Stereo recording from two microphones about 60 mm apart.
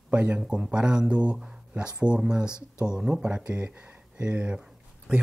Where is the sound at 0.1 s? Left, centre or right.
Right.